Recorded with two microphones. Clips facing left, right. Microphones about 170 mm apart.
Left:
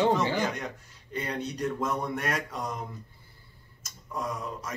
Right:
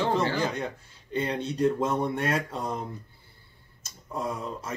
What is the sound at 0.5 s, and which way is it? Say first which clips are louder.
Speech: right 4 dB; 30° right (ahead or behind).